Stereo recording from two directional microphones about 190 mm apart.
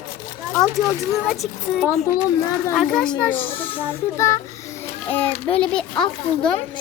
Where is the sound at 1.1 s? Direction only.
Centre (ahead or behind).